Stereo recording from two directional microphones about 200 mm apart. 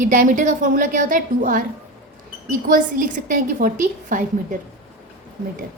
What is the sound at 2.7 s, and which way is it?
A woman's voice, 40° right (ahead or behind).